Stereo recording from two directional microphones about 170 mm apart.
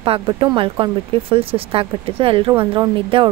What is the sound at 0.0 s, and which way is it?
A woman's voice, 30° right (ahead or behind).